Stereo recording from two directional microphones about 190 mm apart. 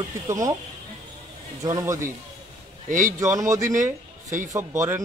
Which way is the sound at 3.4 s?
40° right (ahead or behind).